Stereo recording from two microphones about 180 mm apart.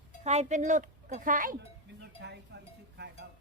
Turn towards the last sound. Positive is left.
turn(degrees=-65)  # may be behind; listen again after turning